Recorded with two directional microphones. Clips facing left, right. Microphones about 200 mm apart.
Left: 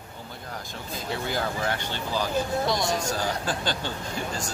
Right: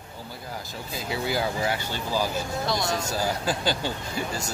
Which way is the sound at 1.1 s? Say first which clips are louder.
Right 2 dB; 10° right (ahead or behind).